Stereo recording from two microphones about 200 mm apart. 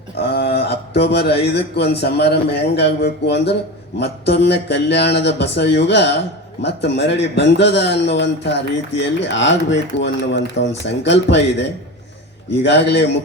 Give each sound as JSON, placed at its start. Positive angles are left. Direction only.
{"t": 0.2, "sound": "speech", "side_deg": 55}
{"t": 12.6, "sound": "speech", "side_deg": 60}